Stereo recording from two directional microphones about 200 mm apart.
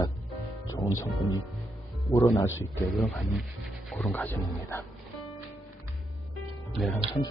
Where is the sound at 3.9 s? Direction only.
5° left (ahead or behind).